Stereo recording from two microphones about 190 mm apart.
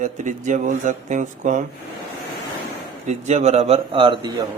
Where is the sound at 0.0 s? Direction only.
40° right (ahead or behind).